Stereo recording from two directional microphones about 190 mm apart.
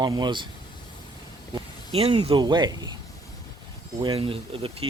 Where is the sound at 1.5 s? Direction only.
30° right (ahead or behind).